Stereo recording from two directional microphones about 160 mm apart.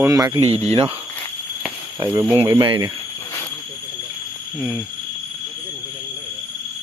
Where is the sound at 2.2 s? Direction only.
15° right (ahead or behind).